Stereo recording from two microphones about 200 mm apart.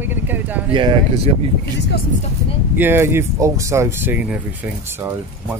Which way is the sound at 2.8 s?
10° right (ahead or behind).